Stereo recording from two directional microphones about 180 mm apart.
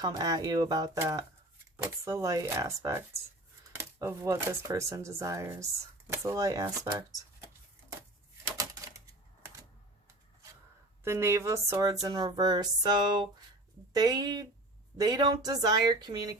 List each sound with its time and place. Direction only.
0.0 s speech: 20° right (ahead or behind)
11.0 s speech: 15° right (ahead or behind)